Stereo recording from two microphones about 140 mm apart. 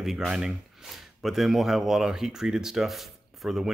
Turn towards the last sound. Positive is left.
turn(degrees=0)  # may be behind; listen again after turning